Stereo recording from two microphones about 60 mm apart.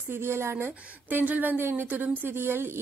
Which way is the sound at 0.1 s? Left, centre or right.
Right.